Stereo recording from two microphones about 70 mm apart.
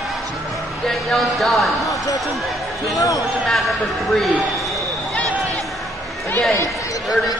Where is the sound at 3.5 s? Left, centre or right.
Centre.